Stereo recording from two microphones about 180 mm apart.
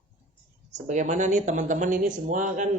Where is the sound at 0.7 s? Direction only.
40° right (ahead or behind).